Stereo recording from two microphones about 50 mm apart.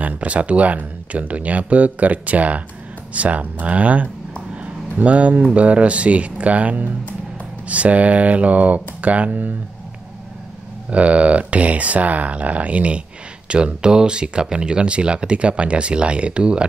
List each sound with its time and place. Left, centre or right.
0.0 s speech: right
10.9 s speech: right